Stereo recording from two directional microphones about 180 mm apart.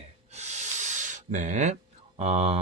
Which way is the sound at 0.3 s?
40° right (ahead or behind).